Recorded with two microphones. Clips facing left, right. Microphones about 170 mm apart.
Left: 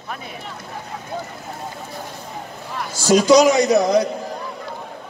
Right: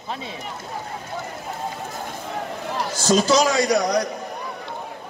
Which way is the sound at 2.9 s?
10° left (ahead or behind).